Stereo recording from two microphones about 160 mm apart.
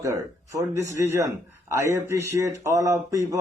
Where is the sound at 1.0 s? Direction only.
15° right (ahead or behind).